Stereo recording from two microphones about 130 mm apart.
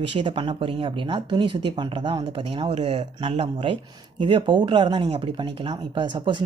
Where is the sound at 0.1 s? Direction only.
40° right (ahead or behind).